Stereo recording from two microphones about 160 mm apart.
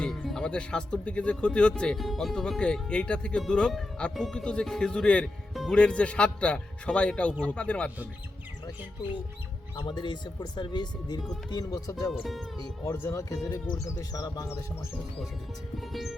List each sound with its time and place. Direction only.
0.0 s speech: 5° left (ahead or behind)
9.7 s speech: 30° left (ahead or behind)
12.1 s speech: centre (ahead or behind)
12.5 s speech: 20° left (ahead or behind)
15.8 s speech: centre (ahead or behind)